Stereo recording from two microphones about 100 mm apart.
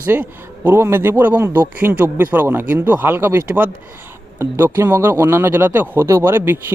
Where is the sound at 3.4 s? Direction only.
15° right (ahead or behind).